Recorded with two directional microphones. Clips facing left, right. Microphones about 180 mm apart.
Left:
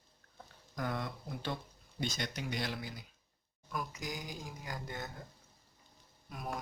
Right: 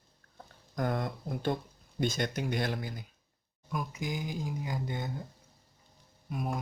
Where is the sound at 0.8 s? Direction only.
50° right (ahead or behind).